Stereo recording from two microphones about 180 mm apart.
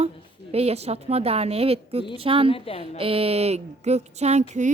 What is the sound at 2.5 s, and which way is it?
Speech, 30° left (ahead or behind).